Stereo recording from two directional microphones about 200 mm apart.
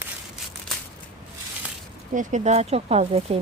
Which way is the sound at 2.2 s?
35° right (ahead or behind).